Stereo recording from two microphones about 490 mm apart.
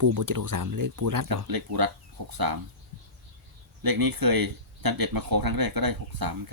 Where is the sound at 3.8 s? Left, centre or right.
Right.